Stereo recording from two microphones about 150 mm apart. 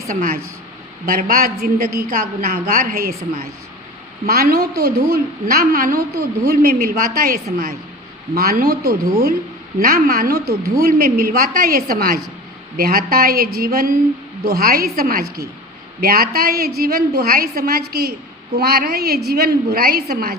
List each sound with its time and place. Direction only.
0.1 s a woman's voice: 65° right (ahead or behind)
4.3 s a woman's voice: 80° right
6.1 s a woman's voice: 90° right; by 7.3 s 75° right (ahead or behind)
8.4 s a woman's voice: 85° right
9.8 s a woman's voice: 75° right (ahead or behind)